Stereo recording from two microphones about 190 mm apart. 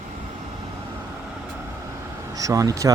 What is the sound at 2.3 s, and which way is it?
Speech, 20° right (ahead or behind).